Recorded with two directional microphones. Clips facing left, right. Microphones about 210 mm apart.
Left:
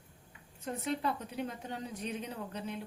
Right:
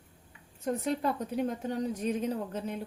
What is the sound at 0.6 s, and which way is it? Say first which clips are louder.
A woman's voice: right 5 dB; 45° right (ahead or behind).